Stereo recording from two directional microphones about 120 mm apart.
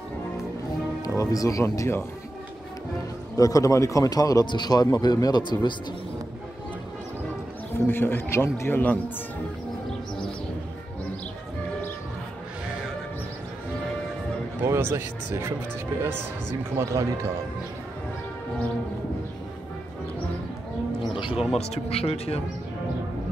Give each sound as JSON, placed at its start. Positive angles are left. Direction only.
{"t": 1.0, "sound": "speech", "side_deg": 30}
{"t": 3.3, "sound": "a man's voice", "side_deg": 30}
{"t": 7.7, "sound": "speech", "side_deg": 20}
{"t": 14.6, "sound": "speech", "side_deg": -20}
{"t": 16.8, "sound": "speech", "side_deg": -20}
{"t": 21.1, "sound": "music", "side_deg": 45}
{"t": 21.5, "sound": "speech", "side_deg": 60}